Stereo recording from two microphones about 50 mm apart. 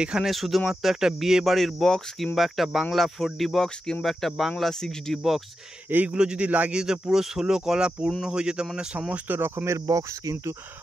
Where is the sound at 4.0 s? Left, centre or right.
Centre.